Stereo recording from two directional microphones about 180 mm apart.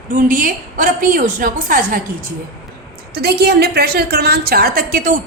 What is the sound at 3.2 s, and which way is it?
A woman's voice, 65° right (ahead or behind).